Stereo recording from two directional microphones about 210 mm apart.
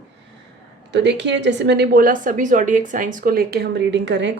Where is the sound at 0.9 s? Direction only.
55° right (ahead or behind).